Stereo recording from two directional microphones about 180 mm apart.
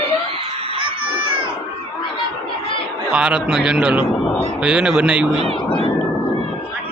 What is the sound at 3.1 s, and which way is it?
A man's voice, 5° right (ahead or behind).